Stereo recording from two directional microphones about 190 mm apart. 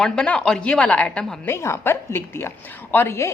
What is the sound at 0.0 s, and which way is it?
A woman's voice, 5° left (ahead or behind).